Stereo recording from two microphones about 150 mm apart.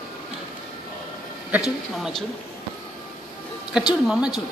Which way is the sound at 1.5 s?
5° right (ahead or behind).